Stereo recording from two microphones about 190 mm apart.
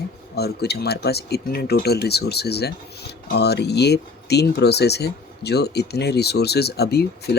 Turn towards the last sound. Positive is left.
turn(degrees=55)  # may be behind; listen again after turning